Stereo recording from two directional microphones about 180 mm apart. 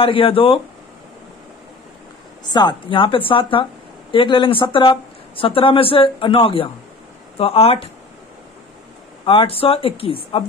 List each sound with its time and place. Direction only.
0.0 s speech: 30° left (ahead or behind)
2.5 s speech: 25° left (ahead or behind)
9.2 s speech: 30° left (ahead or behind)